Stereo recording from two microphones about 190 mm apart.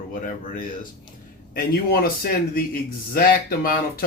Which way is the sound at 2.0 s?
50° left (ahead or behind).